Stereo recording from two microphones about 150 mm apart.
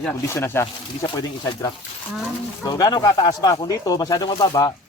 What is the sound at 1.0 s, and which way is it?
Speech, 30° left (ahead or behind).